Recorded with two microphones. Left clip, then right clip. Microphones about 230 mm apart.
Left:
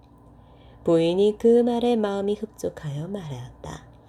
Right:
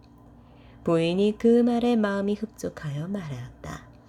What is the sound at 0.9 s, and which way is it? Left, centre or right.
Speech, centre.